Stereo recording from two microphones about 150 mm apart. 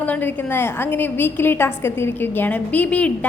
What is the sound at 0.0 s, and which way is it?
A woman's voice, 10° left (ahead or behind).